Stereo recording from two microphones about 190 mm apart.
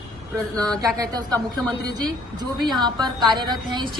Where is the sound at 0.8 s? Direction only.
20° right (ahead or behind).